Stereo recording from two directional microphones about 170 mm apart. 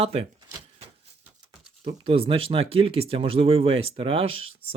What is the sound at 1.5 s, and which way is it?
Speech, 35° right (ahead or behind).